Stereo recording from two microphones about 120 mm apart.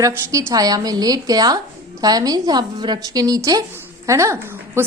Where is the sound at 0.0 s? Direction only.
25° right (ahead or behind).